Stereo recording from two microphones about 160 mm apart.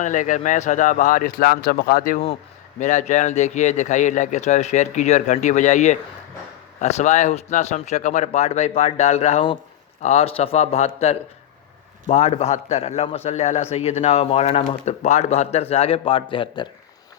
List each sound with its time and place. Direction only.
0.0 s a man's voice: 50° left (ahead or behind)
2.8 s a man's voice: 50° left (ahead or behind); by 16.6 s 30° left (ahead or behind)